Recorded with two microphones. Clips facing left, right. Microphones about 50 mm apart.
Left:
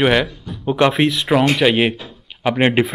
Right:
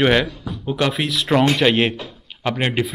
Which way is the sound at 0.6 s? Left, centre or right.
Left.